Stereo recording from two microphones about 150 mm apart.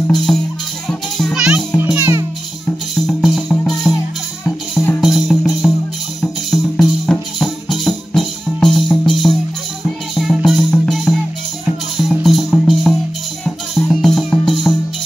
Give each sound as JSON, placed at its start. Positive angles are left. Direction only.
{"t": 0.3, "sound": "music", "side_deg": 5}
{"t": 2.0, "sound": "music", "side_deg": -15}
{"t": 3.1, "sound": "music", "side_deg": 0}
{"t": 5.0, "sound": "music", "side_deg": 0}